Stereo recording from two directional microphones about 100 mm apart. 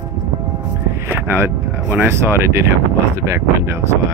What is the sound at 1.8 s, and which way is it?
Speech, 15° right (ahead or behind).